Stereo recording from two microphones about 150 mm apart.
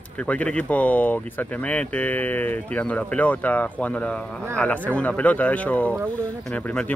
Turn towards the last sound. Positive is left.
turn(degrees=10)  # may be behind; listen again after turning